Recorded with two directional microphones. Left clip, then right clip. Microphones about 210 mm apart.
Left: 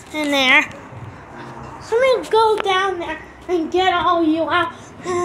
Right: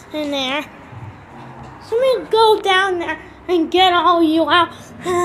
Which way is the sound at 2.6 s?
25° right (ahead or behind).